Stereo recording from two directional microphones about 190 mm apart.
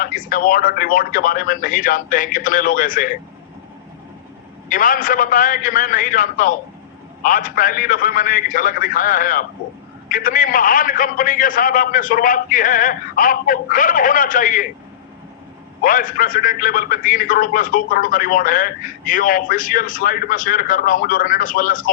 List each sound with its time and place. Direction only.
0.0 s a man's voice: 45° left (ahead or behind)
4.7 s a man's voice: 45° left (ahead or behind)
15.8 s a man's voice: 45° left (ahead or behind)